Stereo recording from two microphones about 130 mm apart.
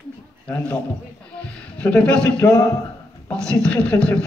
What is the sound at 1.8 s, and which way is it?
A man's voice, 10° left (ahead or behind).